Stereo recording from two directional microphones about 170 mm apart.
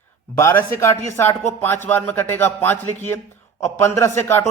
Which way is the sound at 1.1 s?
15° left (ahead or behind).